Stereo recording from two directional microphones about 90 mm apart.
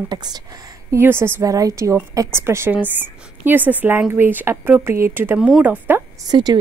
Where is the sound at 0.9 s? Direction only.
30° right (ahead or behind).